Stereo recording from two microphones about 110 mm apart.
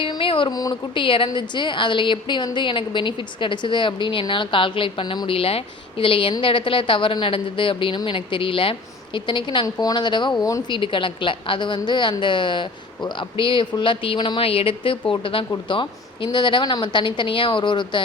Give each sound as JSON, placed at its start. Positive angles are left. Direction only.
{"t": 0.0, "sound": "a sound", "side_deg": 50}
{"t": 0.5, "sound": "speech", "side_deg": 35}
{"t": 0.9, "sound": "a woman's voice", "side_deg": 50}
{"t": 10.7, "sound": "a woman's voice", "side_deg": 50}